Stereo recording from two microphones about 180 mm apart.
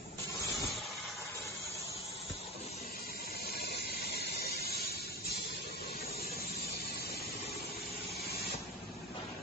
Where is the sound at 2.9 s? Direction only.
55° left (ahead or behind).